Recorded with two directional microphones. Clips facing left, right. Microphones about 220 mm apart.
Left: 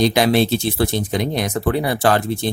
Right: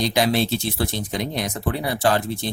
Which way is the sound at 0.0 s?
60° left (ahead or behind).